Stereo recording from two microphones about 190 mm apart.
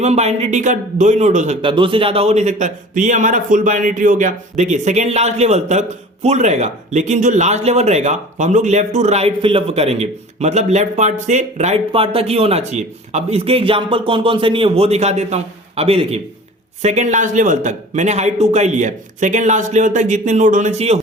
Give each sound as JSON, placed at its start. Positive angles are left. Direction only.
{"t": 0.0, "sound": "a man's voice", "side_deg": -35}
{"t": 1.6, "sound": "a man's voice", "side_deg": -25}